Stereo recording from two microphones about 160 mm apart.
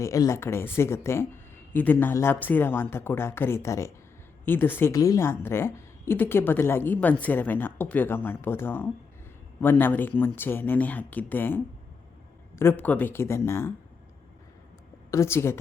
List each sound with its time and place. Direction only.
0.0 s a woman's voice: 20° left (ahead or behind)
15.1 s a woman's voice: 15° left (ahead or behind)